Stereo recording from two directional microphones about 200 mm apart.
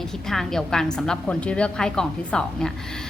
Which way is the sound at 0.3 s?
Centre (ahead or behind).